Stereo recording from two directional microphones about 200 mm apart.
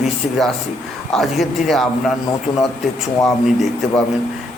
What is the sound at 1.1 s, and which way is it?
Speech, centre (ahead or behind).